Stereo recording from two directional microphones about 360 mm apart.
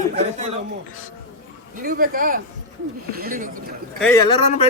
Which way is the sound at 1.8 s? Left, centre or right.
Right.